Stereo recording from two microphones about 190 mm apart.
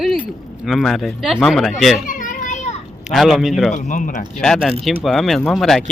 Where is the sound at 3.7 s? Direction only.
40° left (ahead or behind).